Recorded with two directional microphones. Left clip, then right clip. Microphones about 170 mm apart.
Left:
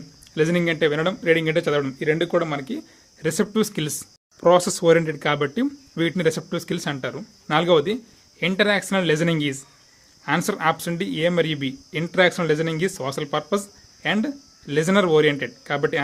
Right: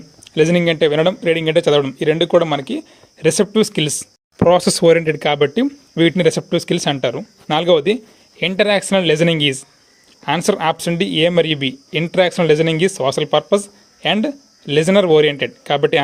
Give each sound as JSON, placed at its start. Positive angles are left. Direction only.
{"t": 0.3, "sound": "speech", "side_deg": -25}